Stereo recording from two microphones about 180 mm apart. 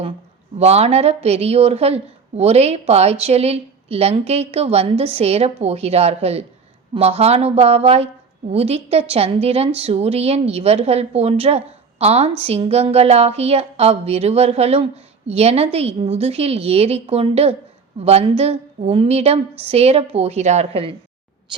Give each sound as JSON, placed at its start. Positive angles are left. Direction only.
{"t": 0.6, "sound": "a woman's voice", "side_deg": -35}